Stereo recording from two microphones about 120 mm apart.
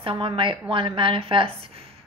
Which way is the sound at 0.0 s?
45° right (ahead or behind).